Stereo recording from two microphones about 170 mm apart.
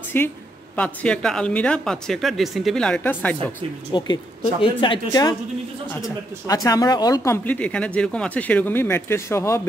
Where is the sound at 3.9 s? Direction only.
25° left (ahead or behind).